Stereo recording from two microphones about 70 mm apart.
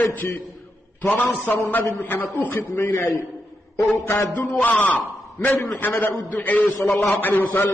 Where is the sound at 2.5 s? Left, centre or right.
Left.